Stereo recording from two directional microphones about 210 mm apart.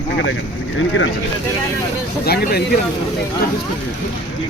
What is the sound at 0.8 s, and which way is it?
Speech, 65° left (ahead or behind).